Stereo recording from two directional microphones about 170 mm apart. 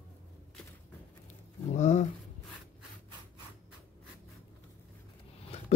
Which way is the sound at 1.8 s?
45° left (ahead or behind).